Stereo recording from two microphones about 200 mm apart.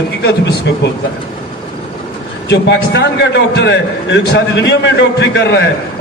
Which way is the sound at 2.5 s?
60° left (ahead or behind).